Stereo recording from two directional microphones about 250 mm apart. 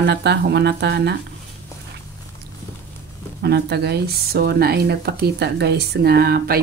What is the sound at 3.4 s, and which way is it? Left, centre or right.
Speech, right.